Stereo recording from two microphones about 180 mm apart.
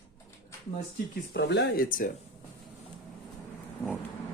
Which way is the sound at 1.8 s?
50° left (ahead or behind).